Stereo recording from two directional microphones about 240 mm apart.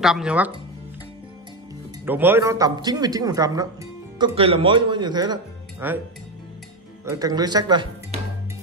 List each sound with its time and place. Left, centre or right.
0.0 s speech: centre
2.0 s speech: centre
7.1 s speech: centre